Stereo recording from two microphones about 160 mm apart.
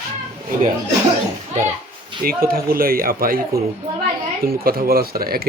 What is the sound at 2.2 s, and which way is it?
Speech, 65° right (ahead or behind).